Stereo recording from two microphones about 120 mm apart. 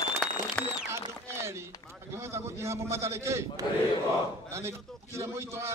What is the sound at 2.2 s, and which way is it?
A man's voice, 25° right (ahead or behind).